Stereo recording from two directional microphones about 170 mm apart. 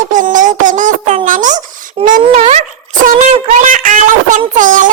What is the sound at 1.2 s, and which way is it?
Babbling, 50° right (ahead or behind).